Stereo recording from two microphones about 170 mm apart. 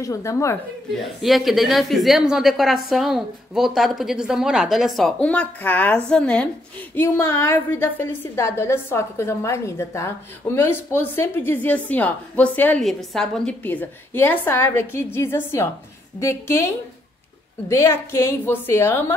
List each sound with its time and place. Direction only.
0.0 s a woman's voice: 20° left (ahead or behind)
1.2 s a woman's voice: centre (ahead or behind)